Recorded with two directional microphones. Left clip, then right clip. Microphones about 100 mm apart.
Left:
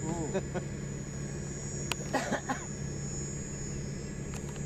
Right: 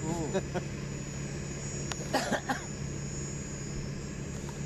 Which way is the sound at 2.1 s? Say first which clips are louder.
Right 3 dB; 30° right (ahead or behind).